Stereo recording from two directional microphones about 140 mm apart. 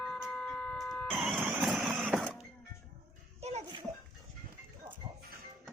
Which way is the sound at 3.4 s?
50° right (ahead or behind).